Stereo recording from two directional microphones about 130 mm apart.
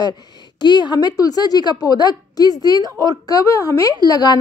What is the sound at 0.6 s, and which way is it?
A woman's voice, 35° left (ahead or behind).